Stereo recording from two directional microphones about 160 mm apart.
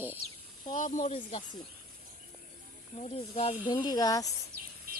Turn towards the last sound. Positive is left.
turn(degrees=25)  # may be behind; listen again after turning